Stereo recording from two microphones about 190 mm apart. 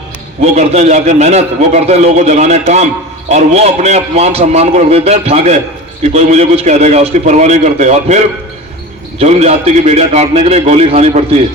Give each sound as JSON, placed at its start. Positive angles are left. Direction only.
{"t": 0.5, "sound": "a man's voice", "side_deg": -35}